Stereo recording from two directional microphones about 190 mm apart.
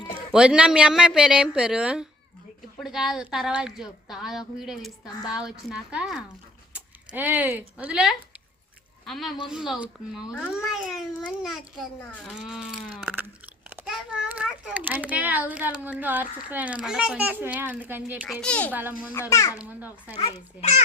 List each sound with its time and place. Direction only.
0.3 s a woman's voice: 5° right (ahead or behind)
6.7 s a sound: 10° right (ahead or behind)
7.8 s a woman's voice: 5° right (ahead or behind)
12.4 s a woman's voice: centre (ahead or behind)
18.4 s a child's voice: 5° left (ahead or behind)
18.7 s a child's voice: 10° right (ahead or behind)
19.3 s a child's voice: 15° left (ahead or behind)
19.5 s a child's voice: 10° right (ahead or behind)
20.1 s a child's voice: 30° left (ahead or behind)